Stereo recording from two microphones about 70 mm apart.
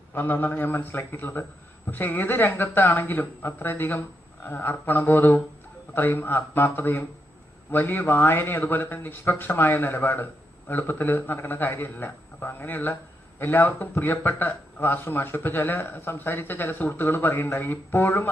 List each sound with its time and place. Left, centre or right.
0.1 s a man's voice: left